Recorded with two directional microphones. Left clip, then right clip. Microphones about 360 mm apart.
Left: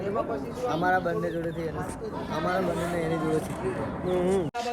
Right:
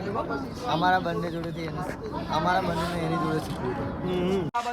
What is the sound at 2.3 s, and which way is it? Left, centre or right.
Speech, right.